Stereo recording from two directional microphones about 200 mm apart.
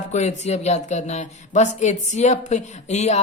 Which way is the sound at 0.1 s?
35° left (ahead or behind).